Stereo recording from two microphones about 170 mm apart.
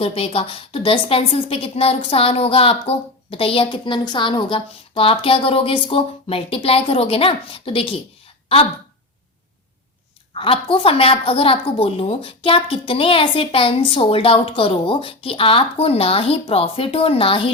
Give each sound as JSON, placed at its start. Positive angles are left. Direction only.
{"t": 0.0, "sound": "a woman's voice", "side_deg": 35}
{"t": 10.3, "sound": "a woman's voice", "side_deg": 30}